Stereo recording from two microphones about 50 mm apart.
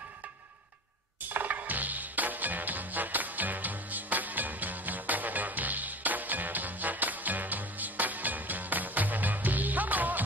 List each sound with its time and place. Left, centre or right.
1.3 s music: right